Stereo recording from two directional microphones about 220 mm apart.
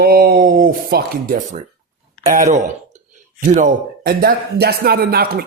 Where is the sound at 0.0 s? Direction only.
45° right (ahead or behind).